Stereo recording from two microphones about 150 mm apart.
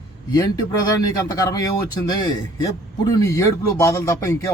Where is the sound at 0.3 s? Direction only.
25° left (ahead or behind).